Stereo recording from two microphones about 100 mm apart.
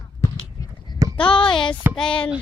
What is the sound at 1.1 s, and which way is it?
Speech, 60° left (ahead or behind).